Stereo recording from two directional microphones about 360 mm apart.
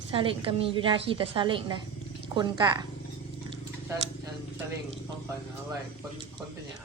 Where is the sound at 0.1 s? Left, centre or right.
Centre.